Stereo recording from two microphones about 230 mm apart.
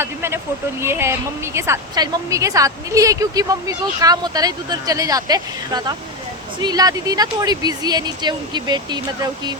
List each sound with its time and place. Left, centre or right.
0.0 s a woman's voice: centre